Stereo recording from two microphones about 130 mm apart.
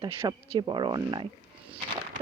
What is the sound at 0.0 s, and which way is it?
Speech, 45° right (ahead or behind).